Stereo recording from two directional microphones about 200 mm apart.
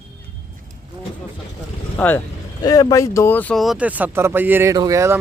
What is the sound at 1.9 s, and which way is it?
Speech, 10° left (ahead or behind).